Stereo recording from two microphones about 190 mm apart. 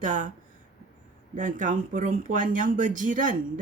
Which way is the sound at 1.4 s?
40° right (ahead or behind).